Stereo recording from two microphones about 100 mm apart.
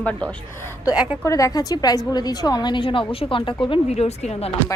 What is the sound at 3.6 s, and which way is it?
Speech, 75° left (ahead or behind).